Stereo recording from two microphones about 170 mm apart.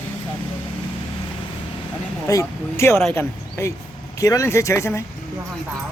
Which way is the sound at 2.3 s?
15° left (ahead or behind).